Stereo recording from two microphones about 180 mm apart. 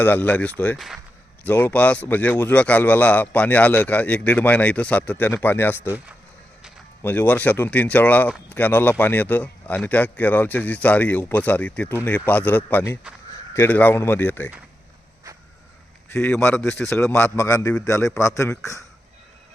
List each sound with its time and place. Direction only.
0.0 s speech: 10° left (ahead or behind)
7.0 s speech: 10° left (ahead or behind)
16.0 s speech: 10° left (ahead or behind)